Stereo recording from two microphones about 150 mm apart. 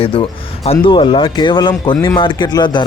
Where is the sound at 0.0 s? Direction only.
40° left (ahead or behind).